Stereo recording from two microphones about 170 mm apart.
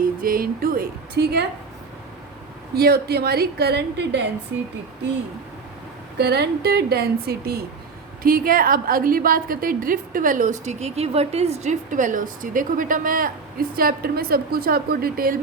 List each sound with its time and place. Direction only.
0.0 s speech: 55° right (ahead or behind); by 1.5 s 70° right (ahead or behind)
2.7 s a woman's voice: 70° right (ahead or behind)
6.1 s a woman's voice: 75° right (ahead or behind)